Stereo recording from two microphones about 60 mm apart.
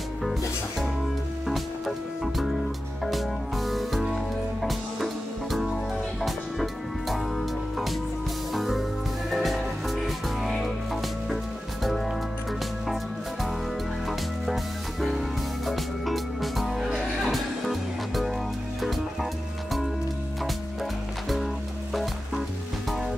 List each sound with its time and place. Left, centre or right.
1.5 s music: centre
21.9 s music: centre